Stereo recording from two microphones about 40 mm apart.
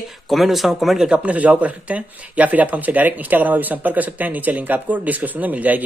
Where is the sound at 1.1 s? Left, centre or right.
Right.